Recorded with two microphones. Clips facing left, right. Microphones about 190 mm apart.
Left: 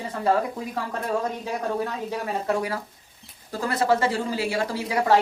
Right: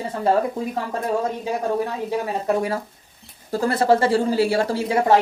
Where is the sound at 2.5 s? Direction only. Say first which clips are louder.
Right 4 dB; 25° right (ahead or behind).